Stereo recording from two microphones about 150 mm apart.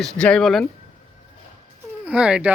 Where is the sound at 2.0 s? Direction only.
10° right (ahead or behind).